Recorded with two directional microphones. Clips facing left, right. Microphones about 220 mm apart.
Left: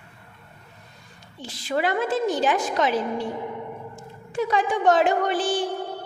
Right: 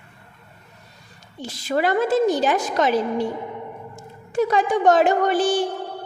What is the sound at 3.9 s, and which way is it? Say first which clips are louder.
A woman's voice: right 6 dB; 40° right (ahead or behind).